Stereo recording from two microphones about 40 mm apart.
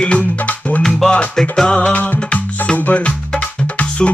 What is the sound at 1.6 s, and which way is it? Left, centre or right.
Music, left.